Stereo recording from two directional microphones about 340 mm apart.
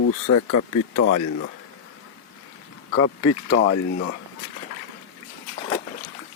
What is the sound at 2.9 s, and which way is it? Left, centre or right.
Speech, left.